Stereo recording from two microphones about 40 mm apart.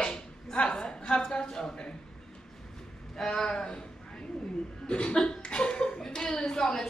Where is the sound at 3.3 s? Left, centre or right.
Left.